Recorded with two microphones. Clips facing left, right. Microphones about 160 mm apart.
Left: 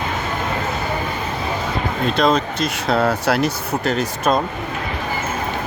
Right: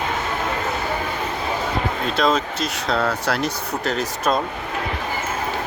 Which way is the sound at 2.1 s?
5° right (ahead or behind).